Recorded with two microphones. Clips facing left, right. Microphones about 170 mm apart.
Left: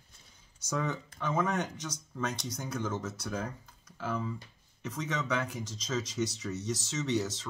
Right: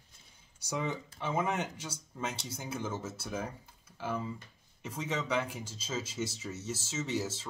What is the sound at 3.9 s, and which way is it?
Computer keyboard, 25° right (ahead or behind).